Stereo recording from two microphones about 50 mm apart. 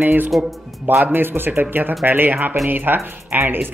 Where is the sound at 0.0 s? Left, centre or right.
Right.